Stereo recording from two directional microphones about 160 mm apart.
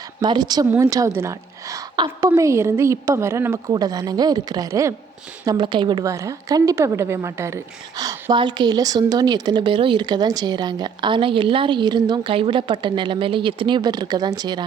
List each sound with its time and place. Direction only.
0.2 s a woman's voice: 25° right (ahead or behind)
5.5 s a woman's voice: 30° right (ahead or behind)